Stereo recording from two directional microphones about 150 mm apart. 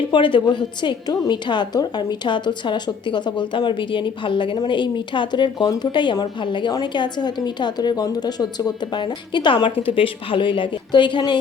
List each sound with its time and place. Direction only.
0.1 s a woman's voice: 35° left (ahead or behind)